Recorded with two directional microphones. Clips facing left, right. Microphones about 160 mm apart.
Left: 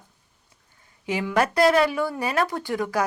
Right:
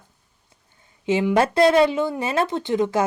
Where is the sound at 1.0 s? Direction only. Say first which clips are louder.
Right 4 dB; 25° right (ahead or behind).